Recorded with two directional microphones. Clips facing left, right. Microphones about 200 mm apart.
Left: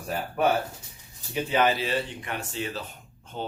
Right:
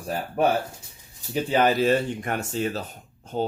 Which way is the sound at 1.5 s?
40° right (ahead or behind).